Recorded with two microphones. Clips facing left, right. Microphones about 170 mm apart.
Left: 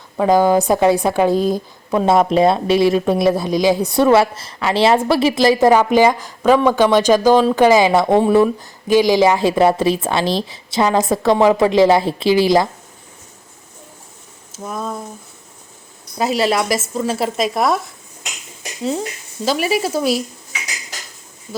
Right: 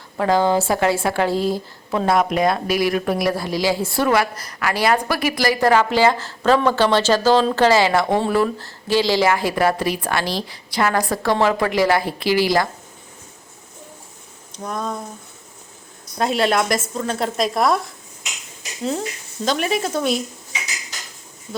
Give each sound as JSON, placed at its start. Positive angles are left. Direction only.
{"t": 0.2, "sound": "a woman's voice", "side_deg": 15}
{"t": 14.5, "sound": "a sound", "side_deg": 5}
{"t": 16.1, "sound": "speech", "side_deg": 5}